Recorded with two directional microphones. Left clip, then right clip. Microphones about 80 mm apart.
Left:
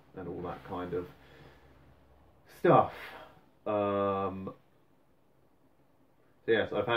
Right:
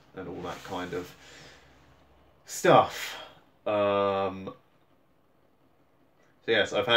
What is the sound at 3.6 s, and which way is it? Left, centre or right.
Speech, right.